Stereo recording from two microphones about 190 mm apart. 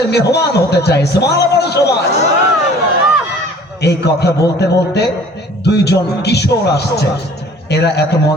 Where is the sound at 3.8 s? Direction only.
60° left (ahead or behind).